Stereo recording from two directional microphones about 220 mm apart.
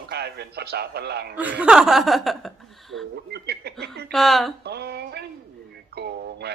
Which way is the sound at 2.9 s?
50° right (ahead or behind).